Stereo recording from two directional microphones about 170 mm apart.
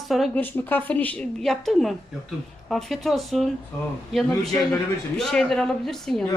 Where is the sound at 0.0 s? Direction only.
Centre (ahead or behind).